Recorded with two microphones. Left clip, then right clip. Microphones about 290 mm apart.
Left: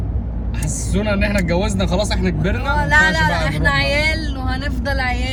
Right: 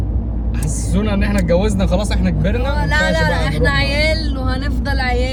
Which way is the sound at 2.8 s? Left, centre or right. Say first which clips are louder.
Left 3 dB; centre.